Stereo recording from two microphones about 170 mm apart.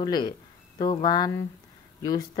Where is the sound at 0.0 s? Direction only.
25° left (ahead or behind).